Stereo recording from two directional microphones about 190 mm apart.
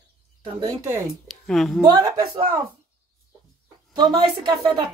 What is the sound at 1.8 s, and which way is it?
Speech, 20° right (ahead or behind).